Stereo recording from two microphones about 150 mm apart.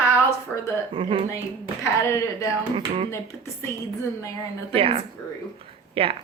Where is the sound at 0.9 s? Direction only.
35° right (ahead or behind).